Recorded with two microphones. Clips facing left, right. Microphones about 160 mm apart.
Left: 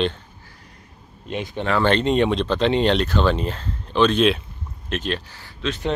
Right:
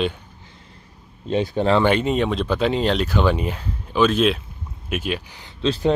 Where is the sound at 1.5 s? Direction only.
30° right (ahead or behind).